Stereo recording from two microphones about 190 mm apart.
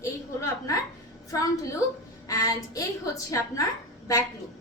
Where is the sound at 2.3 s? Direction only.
15° left (ahead or behind).